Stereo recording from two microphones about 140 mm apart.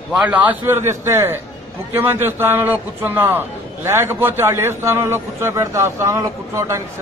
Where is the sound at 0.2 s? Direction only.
10° right (ahead or behind).